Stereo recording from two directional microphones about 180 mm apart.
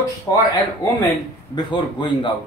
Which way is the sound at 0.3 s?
20° left (ahead or behind).